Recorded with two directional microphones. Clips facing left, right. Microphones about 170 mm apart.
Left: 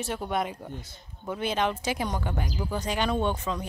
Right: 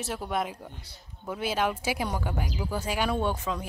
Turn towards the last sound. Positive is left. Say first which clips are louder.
# left 1 dB
turn(degrees=-5)  # may be behind; listen again after turning